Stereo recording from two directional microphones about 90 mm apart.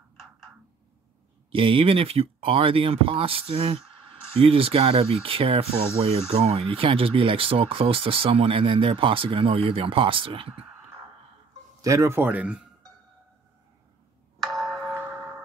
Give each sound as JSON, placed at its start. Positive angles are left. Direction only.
{"t": 1.5, "sound": "speech", "side_deg": -75}
{"t": 11.8, "sound": "speech", "side_deg": -35}
{"t": 14.4, "sound": "a sound", "side_deg": 0}